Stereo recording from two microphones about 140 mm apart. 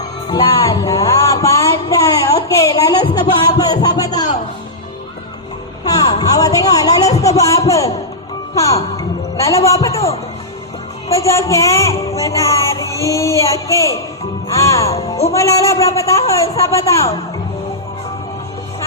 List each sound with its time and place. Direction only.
0.3 s music: 30° left (ahead or behind)
2.6 s a sound: 25° left (ahead or behind)
5.8 s a sound: 25° left (ahead or behind)
7.1 s speech: 25° left (ahead or behind)
9.0 s a man's voice: 25° left (ahead or behind)
11.1 s child singing: 20° left (ahead or behind)